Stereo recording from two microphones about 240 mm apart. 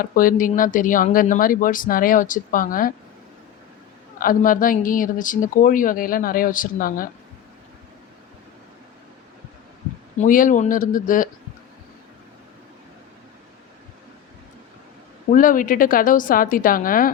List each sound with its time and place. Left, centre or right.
0.0 s speech: left
4.2 s speech: left
10.2 s speech: left
15.3 s speech: left